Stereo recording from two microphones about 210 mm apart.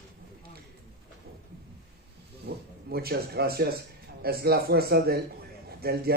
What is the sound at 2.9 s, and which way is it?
A man's voice, 50° right (ahead or behind).